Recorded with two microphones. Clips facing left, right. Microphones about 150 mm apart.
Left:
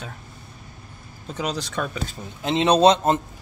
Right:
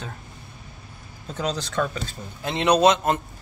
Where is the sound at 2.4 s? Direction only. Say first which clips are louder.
Left 2 dB; 25° left (ahead or behind).